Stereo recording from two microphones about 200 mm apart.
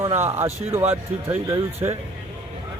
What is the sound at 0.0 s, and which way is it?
Speech, 35° right (ahead or behind).